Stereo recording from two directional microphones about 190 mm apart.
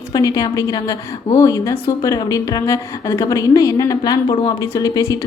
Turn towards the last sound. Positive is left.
turn(degrees=20)  # may be behind; listen again after turning